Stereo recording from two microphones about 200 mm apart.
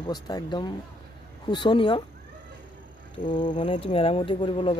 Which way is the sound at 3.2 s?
25° left (ahead or behind).